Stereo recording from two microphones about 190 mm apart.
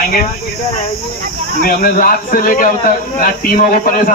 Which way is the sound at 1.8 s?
45° left (ahead or behind).